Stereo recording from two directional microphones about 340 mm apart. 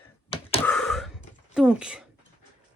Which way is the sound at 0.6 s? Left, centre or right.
Centre.